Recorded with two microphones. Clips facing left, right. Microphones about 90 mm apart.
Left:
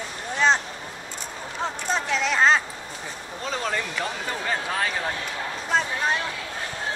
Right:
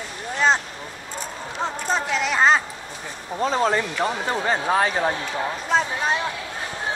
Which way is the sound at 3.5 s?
35° right (ahead or behind).